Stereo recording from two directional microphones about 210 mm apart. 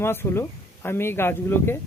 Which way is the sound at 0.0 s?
10° left (ahead or behind).